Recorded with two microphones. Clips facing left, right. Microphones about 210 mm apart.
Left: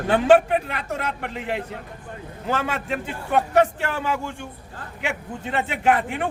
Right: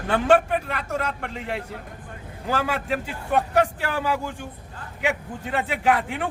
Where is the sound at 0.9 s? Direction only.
5° left (ahead or behind).